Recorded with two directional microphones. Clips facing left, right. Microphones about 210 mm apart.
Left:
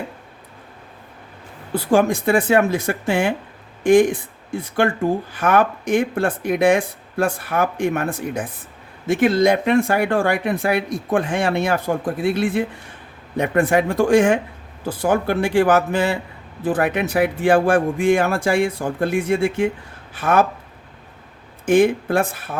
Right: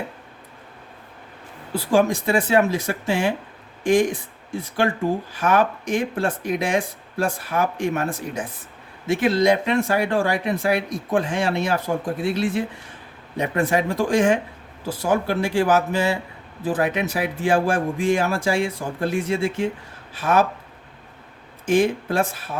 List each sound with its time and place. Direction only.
1.7 s speech: 55° left (ahead or behind)
5.3 s speech: 55° left (ahead or behind)
21.7 s speech: 55° left (ahead or behind)